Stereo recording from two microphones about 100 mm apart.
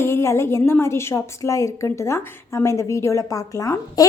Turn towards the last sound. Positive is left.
turn(degrees=35)  # may be behind; listen again after turning